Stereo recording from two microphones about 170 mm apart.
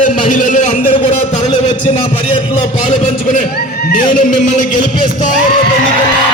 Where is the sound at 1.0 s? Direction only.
40° left (ahead or behind).